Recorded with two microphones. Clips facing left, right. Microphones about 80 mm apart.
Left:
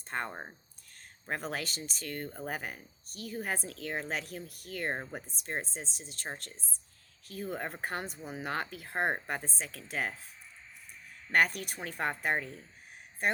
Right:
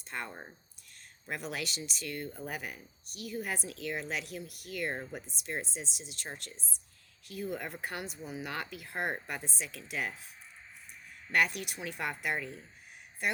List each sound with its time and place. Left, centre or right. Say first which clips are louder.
0.1 s speech: left 4 dB; left
11.3 s speech: left 2 dB; left